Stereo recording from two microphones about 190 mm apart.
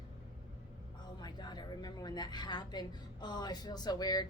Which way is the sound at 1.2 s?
25° left (ahead or behind).